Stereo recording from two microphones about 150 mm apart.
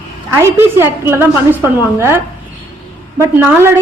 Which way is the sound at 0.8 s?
15° right (ahead or behind).